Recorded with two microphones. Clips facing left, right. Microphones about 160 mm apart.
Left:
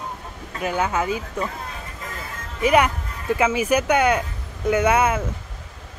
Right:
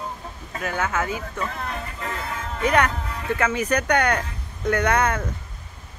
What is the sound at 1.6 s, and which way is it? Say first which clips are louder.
Vehicle: right 4 dB; 70° right (ahead or behind).